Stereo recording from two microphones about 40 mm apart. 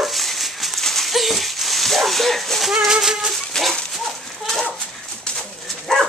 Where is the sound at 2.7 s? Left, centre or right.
Centre.